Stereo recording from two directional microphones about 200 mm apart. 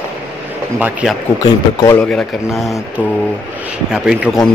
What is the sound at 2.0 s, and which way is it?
Speech, centre (ahead or behind).